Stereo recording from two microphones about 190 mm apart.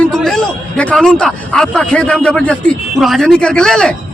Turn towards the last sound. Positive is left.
turn(degrees=5)  # may be behind; listen again after turning